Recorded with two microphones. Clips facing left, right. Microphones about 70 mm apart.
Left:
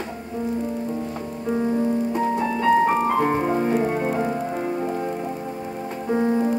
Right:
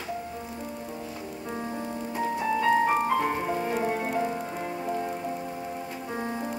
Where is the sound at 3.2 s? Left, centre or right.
Left.